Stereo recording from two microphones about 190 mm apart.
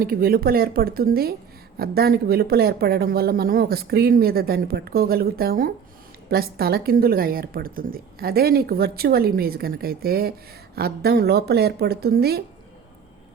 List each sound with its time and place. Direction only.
0.0 s a woman's voice: 50° right (ahead or behind)